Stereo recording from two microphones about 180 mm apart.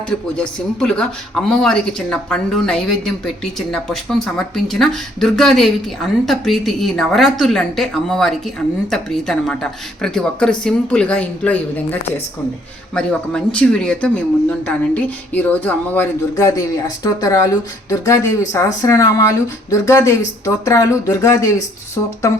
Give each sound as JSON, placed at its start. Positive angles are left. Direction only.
{"t": 0.1, "sound": "speech", "side_deg": 5}